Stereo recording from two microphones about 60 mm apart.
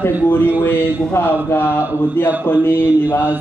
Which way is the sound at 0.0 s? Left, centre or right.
Left.